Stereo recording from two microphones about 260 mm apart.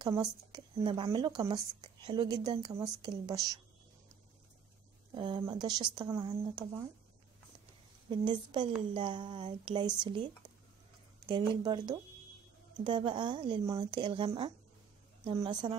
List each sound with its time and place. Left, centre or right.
0.0 s speech: centre
5.1 s speech: centre
8.1 s speech: centre